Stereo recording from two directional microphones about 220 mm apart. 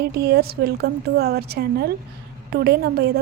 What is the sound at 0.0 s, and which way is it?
A woman's voice, 45° right (ahead or behind).